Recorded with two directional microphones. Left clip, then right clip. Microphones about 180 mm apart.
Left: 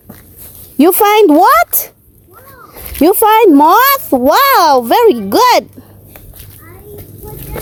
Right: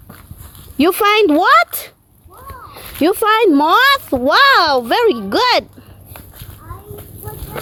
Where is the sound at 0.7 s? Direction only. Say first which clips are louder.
Left 5 dB; 30° left (ahead or behind).